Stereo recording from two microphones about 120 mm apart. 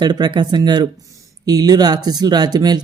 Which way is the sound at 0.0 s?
35° right (ahead or behind).